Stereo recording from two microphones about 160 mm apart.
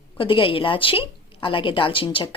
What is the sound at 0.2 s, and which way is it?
Speech, 35° left (ahead or behind).